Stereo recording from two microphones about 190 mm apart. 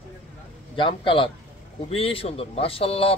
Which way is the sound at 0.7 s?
25° left (ahead or behind).